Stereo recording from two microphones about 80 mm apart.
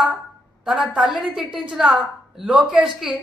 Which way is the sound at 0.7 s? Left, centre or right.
Centre.